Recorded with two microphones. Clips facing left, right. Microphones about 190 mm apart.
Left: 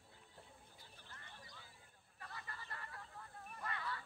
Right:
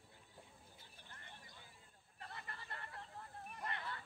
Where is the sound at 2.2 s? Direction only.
25° right (ahead or behind).